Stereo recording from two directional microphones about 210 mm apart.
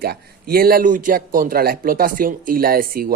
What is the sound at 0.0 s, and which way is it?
Speech, 45° right (ahead or behind).